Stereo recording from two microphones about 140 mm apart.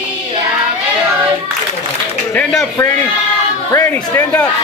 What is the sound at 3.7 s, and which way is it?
Speech, 20° left (ahead or behind).